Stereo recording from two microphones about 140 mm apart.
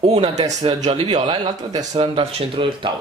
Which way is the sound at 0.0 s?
45° right (ahead or behind).